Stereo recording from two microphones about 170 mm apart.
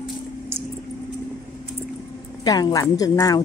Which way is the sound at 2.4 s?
25° left (ahead or behind).